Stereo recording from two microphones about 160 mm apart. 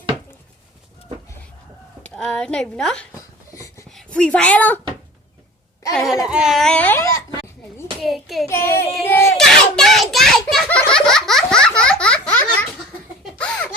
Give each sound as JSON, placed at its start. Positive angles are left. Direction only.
{"t": 2.0, "sound": "speech", "side_deg": 5}
{"t": 3.2, "sound": "a sound", "side_deg": 20}
{"t": 3.8, "sound": "a woman's voice", "side_deg": 5}
{"t": 5.9, "sound": "speech", "side_deg": 0}
{"t": 8.0, "sound": "speech", "side_deg": 0}
{"t": 8.4, "sound": "child singing", "side_deg": 15}
{"t": 9.0, "sound": "crowd", "side_deg": 15}
{"t": 9.4, "sound": "a sound", "side_deg": 5}
{"t": 13.2, "sound": "laughter", "side_deg": 5}